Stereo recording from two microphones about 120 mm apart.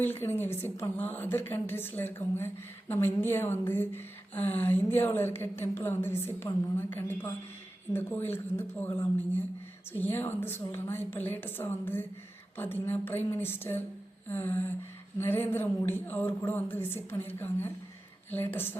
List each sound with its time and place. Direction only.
0.0 s a woman's voice: 20° left (ahead or behind)